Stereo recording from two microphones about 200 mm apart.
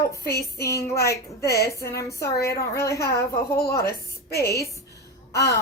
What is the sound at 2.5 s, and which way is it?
Speech, 15° left (ahead or behind).